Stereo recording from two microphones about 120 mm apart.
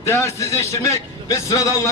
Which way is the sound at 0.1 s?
20° left (ahead or behind).